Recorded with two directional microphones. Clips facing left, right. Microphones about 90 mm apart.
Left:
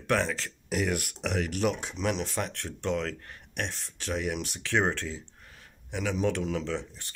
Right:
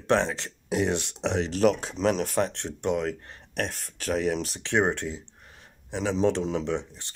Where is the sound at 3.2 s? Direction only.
35° right (ahead or behind).